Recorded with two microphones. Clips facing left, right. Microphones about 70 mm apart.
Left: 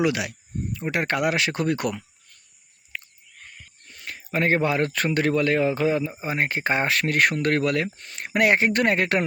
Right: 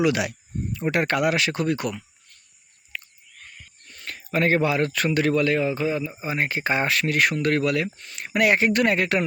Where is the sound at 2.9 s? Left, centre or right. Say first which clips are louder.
Even; left.